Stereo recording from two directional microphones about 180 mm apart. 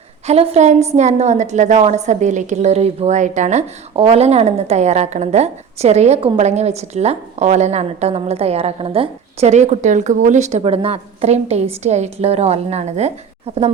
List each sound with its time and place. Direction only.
0.3 s a woman's voice: 35° right (ahead or behind)